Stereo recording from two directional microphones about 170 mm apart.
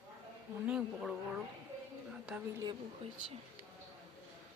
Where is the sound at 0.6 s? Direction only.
5° right (ahead or behind).